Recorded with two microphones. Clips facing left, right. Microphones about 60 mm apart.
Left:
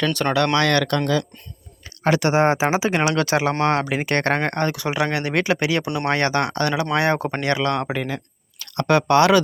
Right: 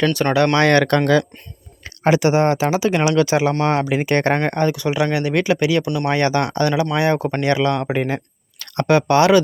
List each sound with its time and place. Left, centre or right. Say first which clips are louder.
0.0 s speech: right 3 dB; centre
0.5 s speech: right 4 dB; right
0.9 s speech: right 5 dB; right
2.0 s speech: right 4 dB; centre
2.5 s speech: right 2 dB; centre
3.0 s speech: right 3 dB; centre
5.8 s speech: right 3 dB; left
6.1 s speech: right 1 dB; centre
7.4 s speech: right 4 dB; centre
7.9 s speech: right 5 dB; right
8.9 s speech: right 2 dB; centre